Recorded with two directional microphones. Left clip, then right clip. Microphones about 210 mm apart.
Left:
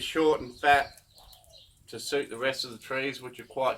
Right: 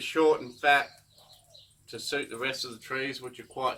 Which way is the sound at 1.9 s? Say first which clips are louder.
Left 2 dB; 15° left (ahead or behind).